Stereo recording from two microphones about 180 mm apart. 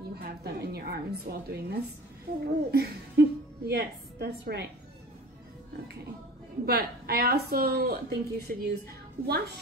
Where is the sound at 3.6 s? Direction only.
60° right (ahead or behind).